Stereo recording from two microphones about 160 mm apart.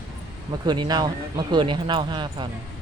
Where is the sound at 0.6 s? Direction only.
25° right (ahead or behind).